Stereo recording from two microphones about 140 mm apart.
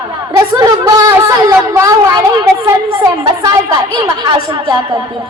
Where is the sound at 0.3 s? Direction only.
25° right (ahead or behind).